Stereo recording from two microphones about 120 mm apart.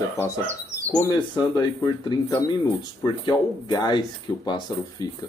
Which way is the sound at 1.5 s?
30° left (ahead or behind).